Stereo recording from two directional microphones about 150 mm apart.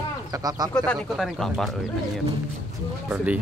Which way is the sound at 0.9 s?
Centre (ahead or behind).